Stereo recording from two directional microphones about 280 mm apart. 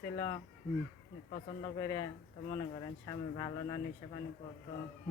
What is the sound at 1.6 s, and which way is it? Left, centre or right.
Speech, centre.